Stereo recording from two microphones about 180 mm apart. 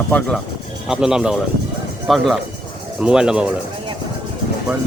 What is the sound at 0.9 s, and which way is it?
Speech, 5° right (ahead or behind).